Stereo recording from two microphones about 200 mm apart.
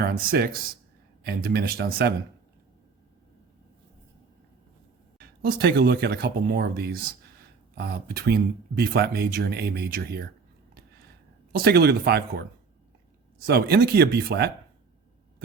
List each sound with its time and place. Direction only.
0.0 s speech: 45° right (ahead or behind)
5.5 s speech: 50° right (ahead or behind)
11.5 s speech: 50° right (ahead or behind)
13.5 s speech: 55° right (ahead or behind)